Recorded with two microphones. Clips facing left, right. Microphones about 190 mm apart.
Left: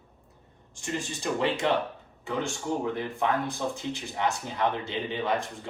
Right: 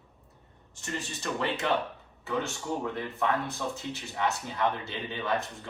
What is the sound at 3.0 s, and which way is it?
Speech, 15° left (ahead or behind).